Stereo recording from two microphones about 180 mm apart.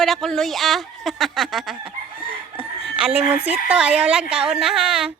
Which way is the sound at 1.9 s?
30° right (ahead or behind).